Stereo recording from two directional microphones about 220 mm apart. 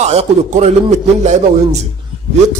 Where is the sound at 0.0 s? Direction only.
30° right (ahead or behind).